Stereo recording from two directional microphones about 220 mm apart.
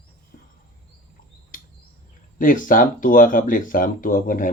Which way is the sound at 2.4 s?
35° left (ahead or behind).